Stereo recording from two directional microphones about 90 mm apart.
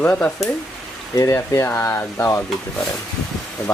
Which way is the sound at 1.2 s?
35° left (ahead or behind).